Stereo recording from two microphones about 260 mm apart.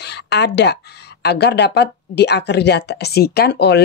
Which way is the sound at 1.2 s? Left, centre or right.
Left.